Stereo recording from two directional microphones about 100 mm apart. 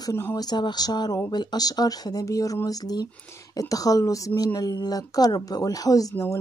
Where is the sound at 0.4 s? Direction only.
45° left (ahead or behind).